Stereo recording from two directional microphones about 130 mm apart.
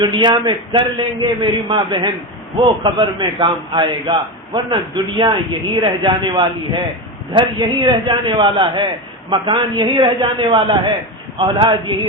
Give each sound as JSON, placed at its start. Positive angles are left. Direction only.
{"t": 0.0, "sound": "a man's voice", "side_deg": -35}